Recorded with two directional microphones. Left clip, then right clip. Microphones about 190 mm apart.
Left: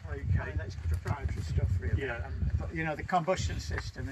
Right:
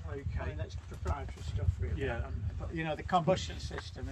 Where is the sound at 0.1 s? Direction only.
15° left (ahead or behind).